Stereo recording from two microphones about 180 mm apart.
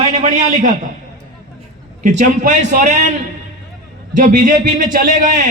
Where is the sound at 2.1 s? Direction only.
50° right (ahead or behind).